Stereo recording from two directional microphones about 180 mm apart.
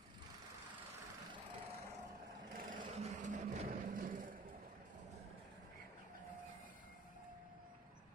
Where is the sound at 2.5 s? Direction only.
50° right (ahead or behind).